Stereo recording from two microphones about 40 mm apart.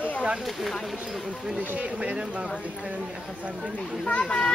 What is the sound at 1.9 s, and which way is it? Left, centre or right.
Speech, right.